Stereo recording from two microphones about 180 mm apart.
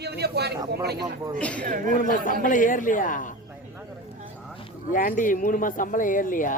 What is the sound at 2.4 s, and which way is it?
Speech, 50° left (ahead or behind).